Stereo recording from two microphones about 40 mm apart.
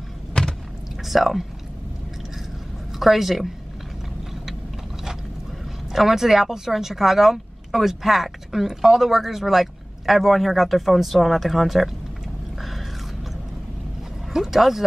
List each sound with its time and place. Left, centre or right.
0.3 s a sound: centre
1.0 s speech: centre
3.0 s speech: centre
5.9 s speech: centre
14.3 s speech: centre